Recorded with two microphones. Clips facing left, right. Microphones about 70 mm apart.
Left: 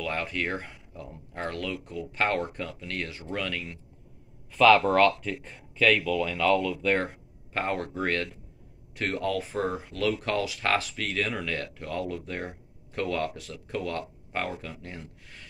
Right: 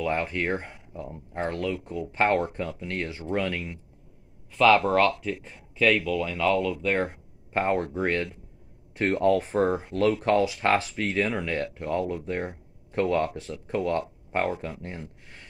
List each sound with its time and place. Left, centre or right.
0.0 s speech: right
4.5 s speech: centre
7.5 s speech: right